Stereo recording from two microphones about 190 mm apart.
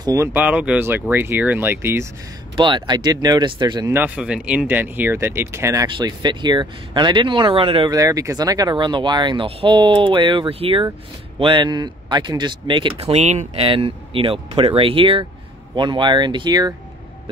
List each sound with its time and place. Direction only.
0.0 s speech: 15° right (ahead or behind)
2.5 s speech: 25° right (ahead or behind)
3.9 s speech: 10° right (ahead or behind)